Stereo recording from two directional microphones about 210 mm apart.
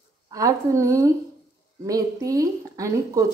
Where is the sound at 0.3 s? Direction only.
15° right (ahead or behind).